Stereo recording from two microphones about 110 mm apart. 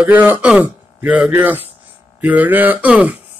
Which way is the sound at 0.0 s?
15° right (ahead or behind).